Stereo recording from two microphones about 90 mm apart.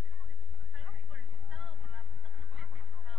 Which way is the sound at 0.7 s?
15° right (ahead or behind).